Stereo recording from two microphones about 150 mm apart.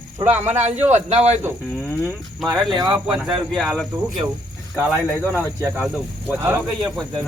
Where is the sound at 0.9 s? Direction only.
45° right (ahead or behind).